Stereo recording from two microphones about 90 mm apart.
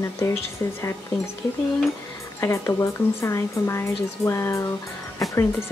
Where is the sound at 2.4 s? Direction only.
30° left (ahead or behind).